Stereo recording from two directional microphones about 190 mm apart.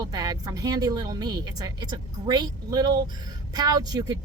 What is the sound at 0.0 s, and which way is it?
Speech, 20° right (ahead or behind).